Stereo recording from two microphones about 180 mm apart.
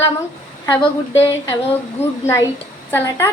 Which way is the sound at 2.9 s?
15° left (ahead or behind).